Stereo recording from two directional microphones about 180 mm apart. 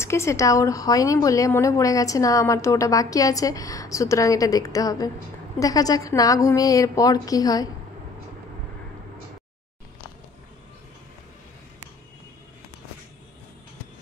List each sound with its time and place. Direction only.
0.0 s speech: 15° left (ahead or behind)